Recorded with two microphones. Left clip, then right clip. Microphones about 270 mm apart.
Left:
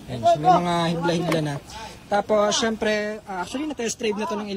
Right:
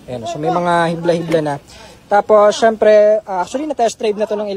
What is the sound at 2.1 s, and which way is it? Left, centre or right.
A man's voice, right.